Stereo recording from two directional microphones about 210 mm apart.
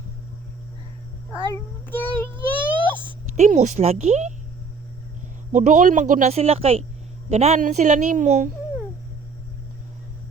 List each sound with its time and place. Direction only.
1.9 s child singing: 10° left (ahead or behind)
2.4 s a sound: 25° right (ahead or behind)
3.4 s speech: 35° right (ahead or behind)
5.5 s speech: 35° right (ahead or behind)